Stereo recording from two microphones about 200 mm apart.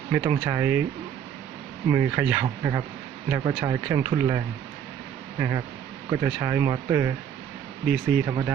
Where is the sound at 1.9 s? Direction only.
10° right (ahead or behind).